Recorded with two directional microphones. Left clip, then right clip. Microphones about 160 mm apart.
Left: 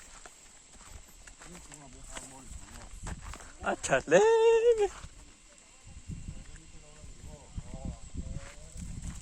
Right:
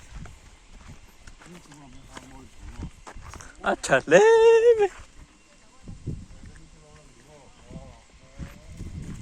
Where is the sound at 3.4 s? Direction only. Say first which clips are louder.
Right 7 dB; 15° right (ahead or behind).